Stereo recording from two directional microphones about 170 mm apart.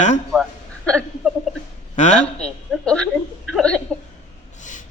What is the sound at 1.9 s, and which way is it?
Speech, 45° left (ahead or behind).